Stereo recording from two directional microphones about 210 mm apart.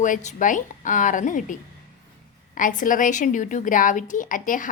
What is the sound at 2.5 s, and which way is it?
A woman's voice, 40° left (ahead or behind).